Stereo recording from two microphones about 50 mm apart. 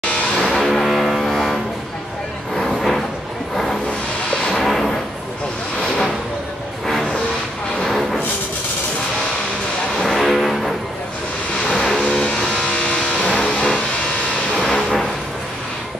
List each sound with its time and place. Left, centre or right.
0.0 s cattle: centre
0.6 s music: centre
2.5 s vehicle: centre
4.6 s music: centre
7.8 s a sound: centre
9.9 s music: centre
11.6 s vehicle: centre
14.7 s music: centre